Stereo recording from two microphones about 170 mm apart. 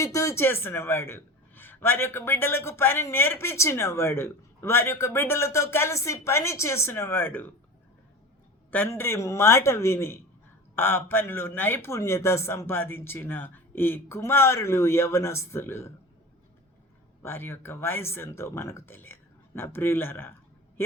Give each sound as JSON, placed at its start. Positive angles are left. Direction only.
{"t": 0.0, "sound": "a man's voice", "side_deg": 20}
{"t": 8.7, "sound": "a man's voice", "side_deg": 10}
{"t": 17.2, "sound": "a man's voice", "side_deg": 15}